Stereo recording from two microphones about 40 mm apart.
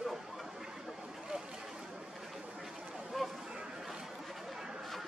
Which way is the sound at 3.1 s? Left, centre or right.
Centre.